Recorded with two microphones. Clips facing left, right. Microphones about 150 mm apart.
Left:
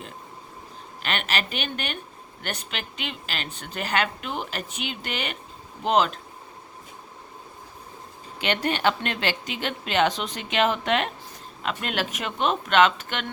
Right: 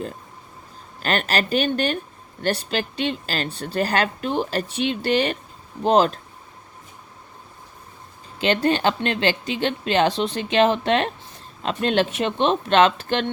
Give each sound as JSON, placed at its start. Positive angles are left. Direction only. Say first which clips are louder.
{"t": 1.0, "sound": "speech", "louder": "right 6 dB", "side_deg": -40}
{"t": 8.4, "sound": "speech", "louder": "right 6 dB", "side_deg": -30}